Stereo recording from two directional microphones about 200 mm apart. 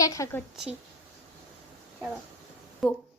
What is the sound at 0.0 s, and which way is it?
Speech, 15° left (ahead or behind).